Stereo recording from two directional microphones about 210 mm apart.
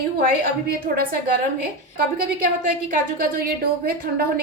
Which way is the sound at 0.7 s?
45° right (ahead or behind).